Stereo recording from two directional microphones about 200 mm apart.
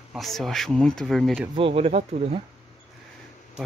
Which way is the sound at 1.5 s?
30° right (ahead or behind).